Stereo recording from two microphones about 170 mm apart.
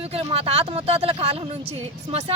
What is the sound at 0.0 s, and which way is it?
Speech, 35° right (ahead or behind).